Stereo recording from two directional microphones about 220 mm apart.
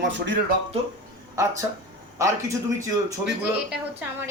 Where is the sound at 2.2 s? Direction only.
15° right (ahead or behind).